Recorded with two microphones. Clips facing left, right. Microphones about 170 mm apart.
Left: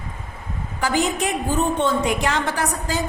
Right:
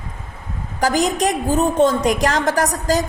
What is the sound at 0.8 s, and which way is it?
A woman's voice, 40° right (ahead or behind).